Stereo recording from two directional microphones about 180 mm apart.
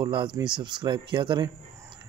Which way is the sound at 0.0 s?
25° right (ahead or behind).